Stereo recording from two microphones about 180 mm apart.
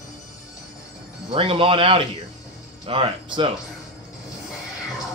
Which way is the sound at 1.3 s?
30° right (ahead or behind).